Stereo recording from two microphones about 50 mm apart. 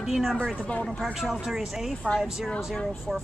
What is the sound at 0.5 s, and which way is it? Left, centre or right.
Speech, left.